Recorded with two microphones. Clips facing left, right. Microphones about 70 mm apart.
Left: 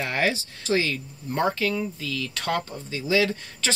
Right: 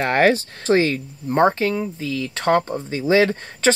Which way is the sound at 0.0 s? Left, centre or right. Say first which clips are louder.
Right 9 dB; right.